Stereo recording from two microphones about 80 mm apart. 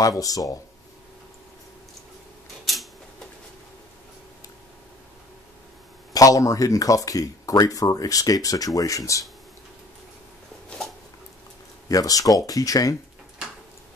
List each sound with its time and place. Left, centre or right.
0.0 s speech: left
2.6 s a sound: centre
6.1 s speech: left
11.9 s speech: left